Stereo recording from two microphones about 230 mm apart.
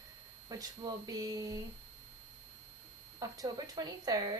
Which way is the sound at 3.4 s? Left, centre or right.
Centre.